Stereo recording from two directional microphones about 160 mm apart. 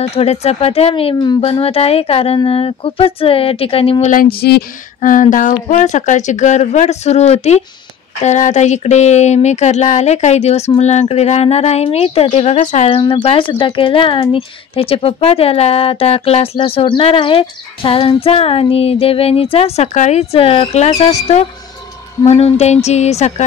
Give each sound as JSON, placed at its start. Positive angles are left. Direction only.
{"t": 0.0, "sound": "speech", "side_deg": 40}
{"t": 4.1, "sound": "speech", "side_deg": 65}
{"t": 12.9, "sound": "speech", "side_deg": 35}